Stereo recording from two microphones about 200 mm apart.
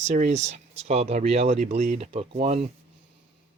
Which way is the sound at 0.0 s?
35° right (ahead or behind).